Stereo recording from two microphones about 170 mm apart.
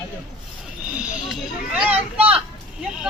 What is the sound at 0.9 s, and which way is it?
Speech, 5° right (ahead or behind).